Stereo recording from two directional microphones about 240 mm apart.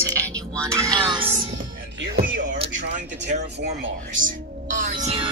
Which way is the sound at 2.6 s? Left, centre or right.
Right.